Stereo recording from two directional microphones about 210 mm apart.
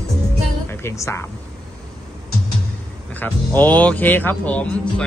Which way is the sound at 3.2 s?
10° left (ahead or behind).